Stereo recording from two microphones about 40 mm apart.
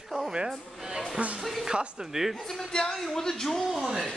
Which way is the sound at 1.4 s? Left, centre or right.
Centre.